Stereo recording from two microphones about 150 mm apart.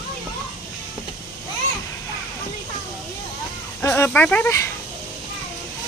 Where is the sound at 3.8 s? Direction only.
15° left (ahead or behind).